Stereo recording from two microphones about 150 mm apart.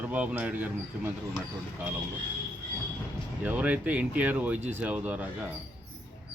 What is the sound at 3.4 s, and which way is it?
A man's voice, 10° right (ahead or behind).